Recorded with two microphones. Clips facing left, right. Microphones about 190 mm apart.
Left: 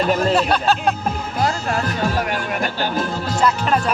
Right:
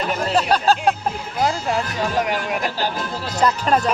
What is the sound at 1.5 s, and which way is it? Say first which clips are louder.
Speech: right 1 dB; 20° right (ahead or behind).